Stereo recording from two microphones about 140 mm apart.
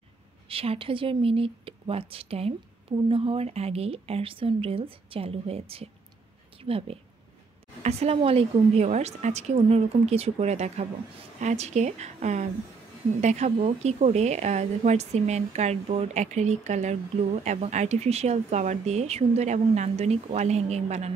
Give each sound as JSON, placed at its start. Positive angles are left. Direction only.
{"t": 0.5, "sound": "a woman's voice", "side_deg": -40}